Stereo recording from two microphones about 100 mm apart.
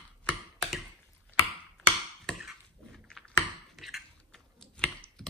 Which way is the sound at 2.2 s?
Centre (ahead or behind).